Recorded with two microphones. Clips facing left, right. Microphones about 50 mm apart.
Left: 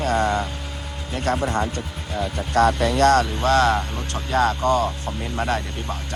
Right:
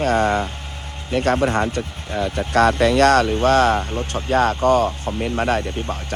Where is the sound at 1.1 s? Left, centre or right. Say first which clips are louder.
Right 5 dB; right.